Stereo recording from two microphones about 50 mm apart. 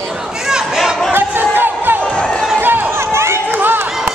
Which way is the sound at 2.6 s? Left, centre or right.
Right.